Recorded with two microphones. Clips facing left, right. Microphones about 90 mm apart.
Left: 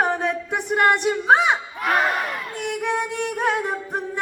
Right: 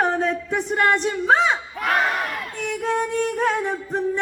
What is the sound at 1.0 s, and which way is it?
Speech, 15° left (ahead or behind).